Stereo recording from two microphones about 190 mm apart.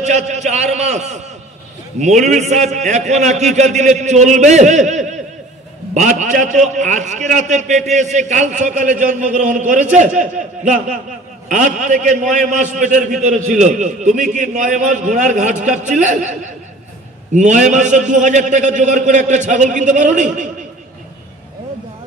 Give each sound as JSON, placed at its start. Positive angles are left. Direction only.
{"t": 0.0, "sound": "a man's voice", "side_deg": -40}